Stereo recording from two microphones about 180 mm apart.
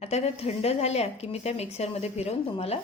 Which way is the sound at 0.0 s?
35° left (ahead or behind).